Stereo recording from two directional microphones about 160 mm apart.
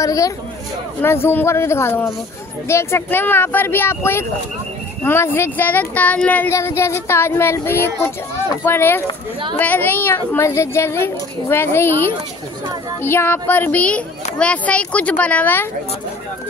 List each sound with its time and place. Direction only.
0.0 s speech: 20° left (ahead or behind)
13.0 s speech: 15° left (ahead or behind)